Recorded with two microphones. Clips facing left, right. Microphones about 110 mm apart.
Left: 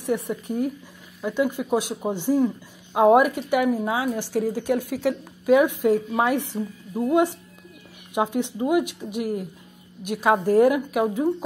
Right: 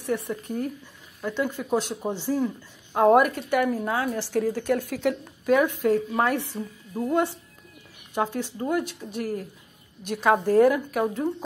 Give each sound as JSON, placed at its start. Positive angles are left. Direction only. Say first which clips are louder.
{"t": 0.0, "sound": "speech", "louder": "left 2 dB", "side_deg": 15}